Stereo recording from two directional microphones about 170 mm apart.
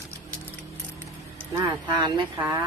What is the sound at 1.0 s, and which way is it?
Vehicle, 20° right (ahead or behind).